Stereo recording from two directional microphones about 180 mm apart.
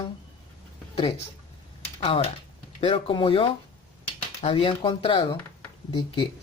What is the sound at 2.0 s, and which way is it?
Speech, 30° left (ahead or behind).